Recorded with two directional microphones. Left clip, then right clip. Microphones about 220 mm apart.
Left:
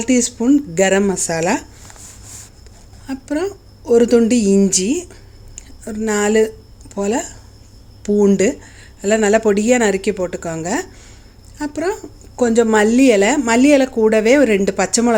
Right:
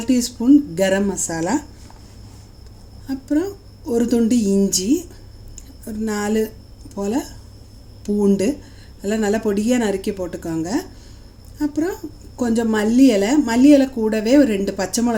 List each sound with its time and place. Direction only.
0.0 s a woman's voice: 25° left (ahead or behind)
3.1 s a woman's voice: 30° left (ahead or behind)